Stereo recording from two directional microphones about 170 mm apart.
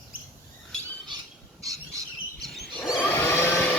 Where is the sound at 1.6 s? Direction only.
20° right (ahead or behind).